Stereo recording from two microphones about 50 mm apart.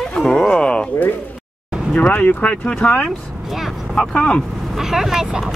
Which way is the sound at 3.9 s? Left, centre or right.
Centre.